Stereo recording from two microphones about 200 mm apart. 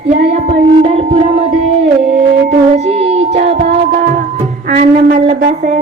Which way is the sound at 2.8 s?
30° right (ahead or behind).